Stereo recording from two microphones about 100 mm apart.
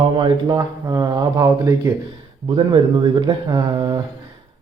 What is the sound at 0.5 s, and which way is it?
Speech, 35° right (ahead or behind).